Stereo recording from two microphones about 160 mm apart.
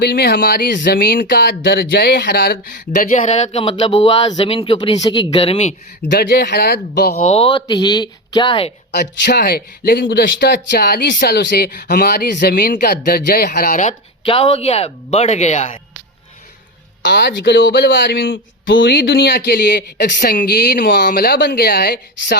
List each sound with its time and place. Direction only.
0.0 s speech: 80° left
0.8 s a man's voice: 70° left (ahead or behind); by 5.2 s 25° left (ahead or behind)
5.3 s a man's voice: 35° left (ahead or behind)
6.0 s speech: 80° left
6.9 s speech: 75° left (ahead or behind)
7.2 s speech: 40° left (ahead or behind)
8.9 s speech: 90° left; by 13.9 s 55° left (ahead or behind)
14.3 s a man's voice: 35° left (ahead or behind)
17.0 s speech: 90° left